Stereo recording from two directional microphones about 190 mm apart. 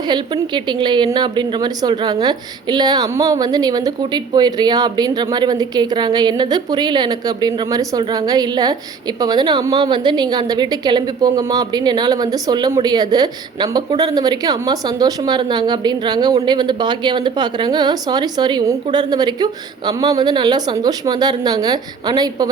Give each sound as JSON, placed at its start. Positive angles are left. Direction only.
{"t": 0.1, "sound": "a woman's voice", "side_deg": -25}